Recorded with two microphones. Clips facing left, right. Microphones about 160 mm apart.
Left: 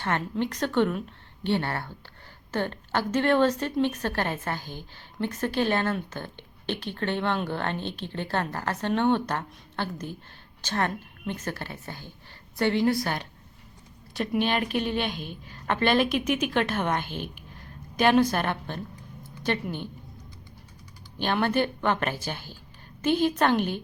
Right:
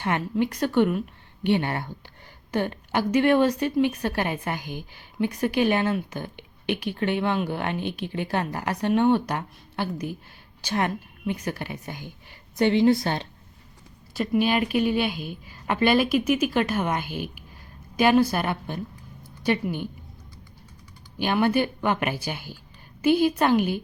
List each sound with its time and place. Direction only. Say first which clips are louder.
0.0 s a woman's voice: right 3 dB; 10° right (ahead or behind)
14.1 s a woman's voice: right 3 dB; 5° right (ahead or behind)
21.2 s a woman's voice: right 3 dB; 10° right (ahead or behind)